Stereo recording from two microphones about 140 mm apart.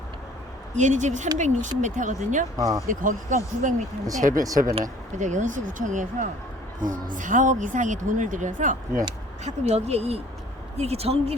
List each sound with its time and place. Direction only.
0.7 s speech: 60° right (ahead or behind)
2.6 s speech: 25° right (ahead or behind)
2.8 s speech: 75° right (ahead or behind)
9.4 s speech: 50° right (ahead or behind)